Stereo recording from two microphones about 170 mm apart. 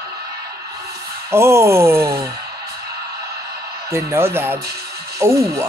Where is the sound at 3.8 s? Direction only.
15° right (ahead or behind).